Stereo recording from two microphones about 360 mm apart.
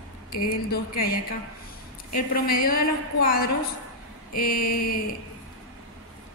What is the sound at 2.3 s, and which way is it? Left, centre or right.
A woman's voice, left.